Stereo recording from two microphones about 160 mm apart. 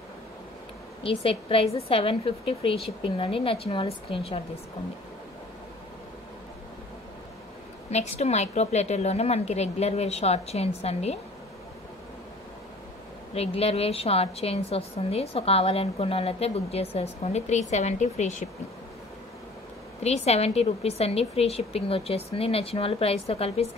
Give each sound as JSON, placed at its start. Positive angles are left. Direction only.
{"t": 1.0, "sound": "a woman's voice", "side_deg": 35}
{"t": 7.9, "sound": "a woman's voice", "side_deg": 45}
{"t": 13.3, "sound": "a woman's voice", "side_deg": 40}
{"t": 20.0, "sound": "a woman's voice", "side_deg": 40}